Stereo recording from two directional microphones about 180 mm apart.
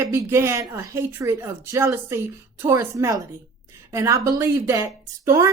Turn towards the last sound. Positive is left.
turn(degrees=-15)  # may be behind; listen again after turning